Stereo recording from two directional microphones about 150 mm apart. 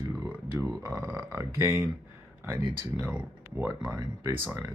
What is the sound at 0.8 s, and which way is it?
Speech, 20° right (ahead or behind).